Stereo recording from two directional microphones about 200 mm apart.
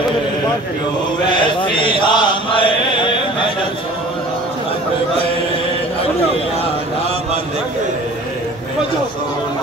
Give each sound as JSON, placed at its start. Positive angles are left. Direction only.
{"t": 1.4, "sound": "chant", "side_deg": 25}